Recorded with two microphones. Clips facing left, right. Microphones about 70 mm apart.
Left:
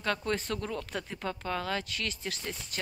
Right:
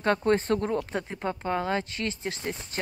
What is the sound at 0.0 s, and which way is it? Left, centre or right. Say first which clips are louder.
Speech: right 8 dB; right.